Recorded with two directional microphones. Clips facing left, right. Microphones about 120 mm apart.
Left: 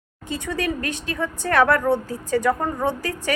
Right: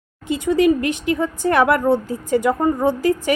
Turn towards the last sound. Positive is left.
turn(degrees=-15)  # may be behind; listen again after turning